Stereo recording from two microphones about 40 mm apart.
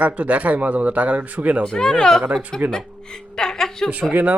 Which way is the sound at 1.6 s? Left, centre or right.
Centre.